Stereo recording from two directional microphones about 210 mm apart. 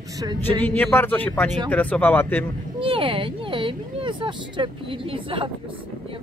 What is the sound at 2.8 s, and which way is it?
Speech, 25° right (ahead or behind).